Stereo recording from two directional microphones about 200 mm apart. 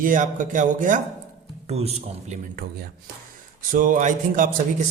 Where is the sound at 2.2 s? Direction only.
50° right (ahead or behind).